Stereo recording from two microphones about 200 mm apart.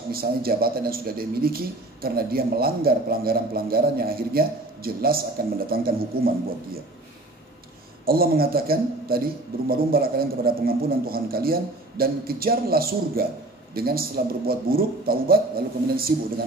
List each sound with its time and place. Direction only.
0.1 s speech: 50° right (ahead or behind)
8.0 s speech: 50° right (ahead or behind)